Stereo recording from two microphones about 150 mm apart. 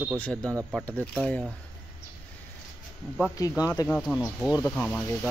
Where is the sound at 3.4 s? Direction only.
20° left (ahead or behind).